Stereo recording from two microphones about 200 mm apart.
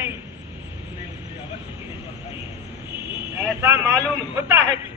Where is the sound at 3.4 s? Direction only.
10° right (ahead or behind).